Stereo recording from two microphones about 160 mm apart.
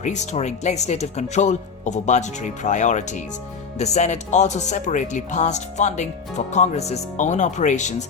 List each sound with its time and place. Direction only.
0.0 s speech: 45° left (ahead or behind)